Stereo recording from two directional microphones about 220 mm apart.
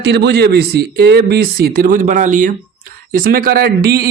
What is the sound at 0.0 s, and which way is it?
Speech, 50° right (ahead or behind).